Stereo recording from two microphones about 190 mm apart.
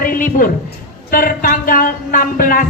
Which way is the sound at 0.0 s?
50° left (ahead or behind).